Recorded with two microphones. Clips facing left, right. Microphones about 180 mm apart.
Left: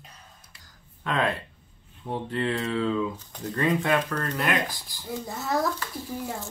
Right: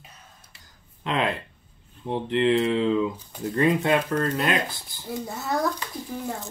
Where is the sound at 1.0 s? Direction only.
20° right (ahead or behind).